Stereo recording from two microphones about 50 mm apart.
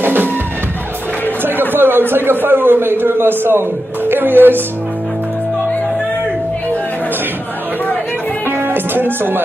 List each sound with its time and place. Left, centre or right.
0.0 s music: right
1.4 s a man's voice: right
8.5 s music: right